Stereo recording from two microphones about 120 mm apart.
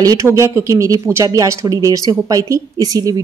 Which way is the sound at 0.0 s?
25° right (ahead or behind).